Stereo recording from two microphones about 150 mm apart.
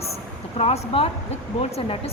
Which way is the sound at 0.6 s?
45° left (ahead or behind).